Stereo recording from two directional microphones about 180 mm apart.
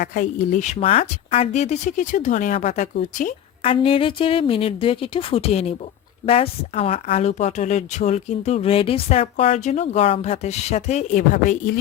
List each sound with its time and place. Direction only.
0.0 s a woman's voice: 45° left (ahead or behind)
3.6 s a woman's voice: 30° left (ahead or behind); by 11.8 s 45° left (ahead or behind)